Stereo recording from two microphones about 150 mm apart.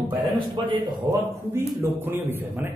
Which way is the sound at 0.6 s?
30° right (ahead or behind).